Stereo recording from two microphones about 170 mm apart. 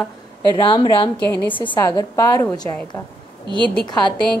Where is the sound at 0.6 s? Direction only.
30° left (ahead or behind).